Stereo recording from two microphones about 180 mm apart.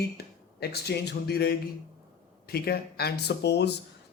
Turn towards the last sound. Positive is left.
turn(degrees=70)  # may be behind; listen again after turning